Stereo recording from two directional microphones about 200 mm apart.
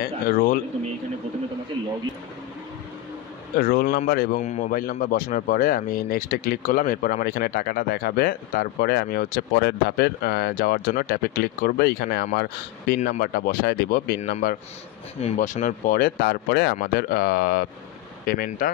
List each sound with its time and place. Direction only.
0.0 s speech: 45° left (ahead or behind)
3.5 s speech: 45° left (ahead or behind)